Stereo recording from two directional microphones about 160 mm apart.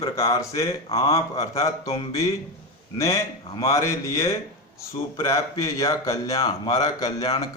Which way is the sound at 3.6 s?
20° left (ahead or behind).